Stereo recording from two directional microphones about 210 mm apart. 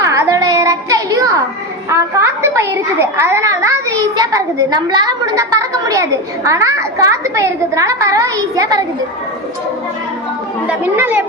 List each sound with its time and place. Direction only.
0.0 s a sound: 15° right (ahead or behind)
1.9 s a child's voice: 15° right (ahead or behind)
10.7 s a child's voice: 10° right (ahead or behind)